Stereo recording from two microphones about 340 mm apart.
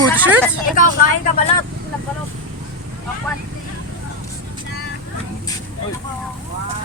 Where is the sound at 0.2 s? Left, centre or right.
Centre.